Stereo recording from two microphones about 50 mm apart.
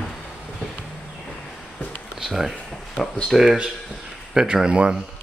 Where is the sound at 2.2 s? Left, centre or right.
Centre.